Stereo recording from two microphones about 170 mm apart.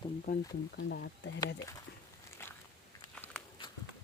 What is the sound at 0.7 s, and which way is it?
Speech, 75° left (ahead or behind).